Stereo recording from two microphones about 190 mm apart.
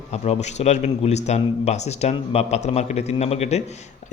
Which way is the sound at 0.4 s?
35° left (ahead or behind).